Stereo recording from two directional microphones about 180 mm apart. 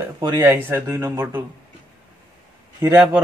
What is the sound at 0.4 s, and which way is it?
Speech, 10° right (ahead or behind).